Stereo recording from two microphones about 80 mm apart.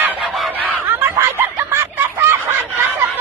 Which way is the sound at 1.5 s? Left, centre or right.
Right.